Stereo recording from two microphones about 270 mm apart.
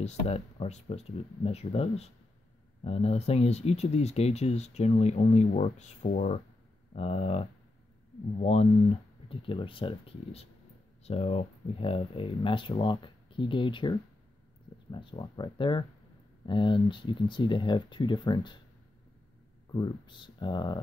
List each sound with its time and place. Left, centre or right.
0.0 s speech: left
19.7 s speech: centre